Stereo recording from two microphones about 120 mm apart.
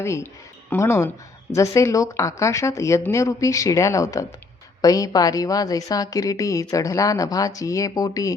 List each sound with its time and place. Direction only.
0.0 s a woman's voice: 20° left (ahead or behind)